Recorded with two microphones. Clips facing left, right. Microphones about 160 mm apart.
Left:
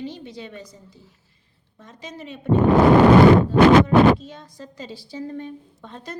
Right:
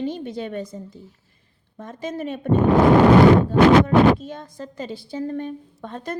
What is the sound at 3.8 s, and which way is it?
A woman's voice, 50° right (ahead or behind).